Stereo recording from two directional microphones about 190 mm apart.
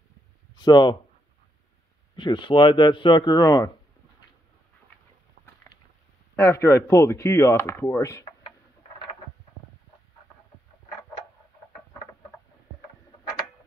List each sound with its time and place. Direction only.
0.6 s speech: 20° left (ahead or behind)
2.1 s speech: 25° left (ahead or behind)
6.3 s speech: 15° left (ahead or behind)